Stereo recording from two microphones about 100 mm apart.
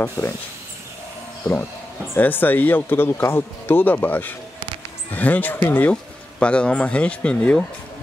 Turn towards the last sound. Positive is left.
turn(degrees=10)  # may be behind; listen again after turning